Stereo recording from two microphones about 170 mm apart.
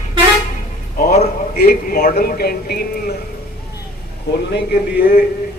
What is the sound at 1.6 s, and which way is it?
A man's voice, 60° left (ahead or behind).